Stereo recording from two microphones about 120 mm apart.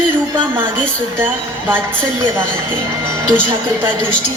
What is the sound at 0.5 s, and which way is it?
A woman's voice, 15° right (ahead or behind).